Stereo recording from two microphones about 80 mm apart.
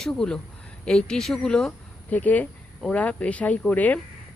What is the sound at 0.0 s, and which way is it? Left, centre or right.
Speech, centre.